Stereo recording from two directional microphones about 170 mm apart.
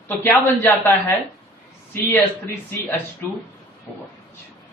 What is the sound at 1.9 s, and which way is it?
Speech, 15° left (ahead or behind).